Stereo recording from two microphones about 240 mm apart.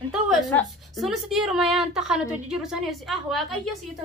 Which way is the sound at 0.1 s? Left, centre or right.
Centre.